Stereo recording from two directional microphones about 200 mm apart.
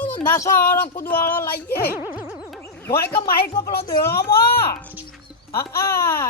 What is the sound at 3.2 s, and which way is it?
Speech, 50° left (ahead or behind).